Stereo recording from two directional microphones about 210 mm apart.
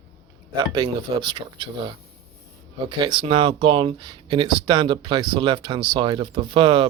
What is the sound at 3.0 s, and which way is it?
Speech, 25° right (ahead or behind).